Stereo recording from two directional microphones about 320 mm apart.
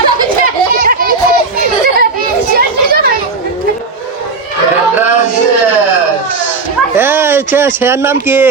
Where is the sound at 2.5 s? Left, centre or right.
Right.